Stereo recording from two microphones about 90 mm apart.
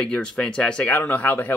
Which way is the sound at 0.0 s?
10° left (ahead or behind).